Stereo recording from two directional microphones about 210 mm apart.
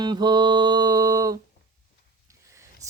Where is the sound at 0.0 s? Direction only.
20° right (ahead or behind).